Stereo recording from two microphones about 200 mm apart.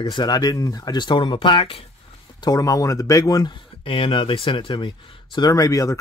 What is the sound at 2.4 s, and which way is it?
Speech, 15° left (ahead or behind).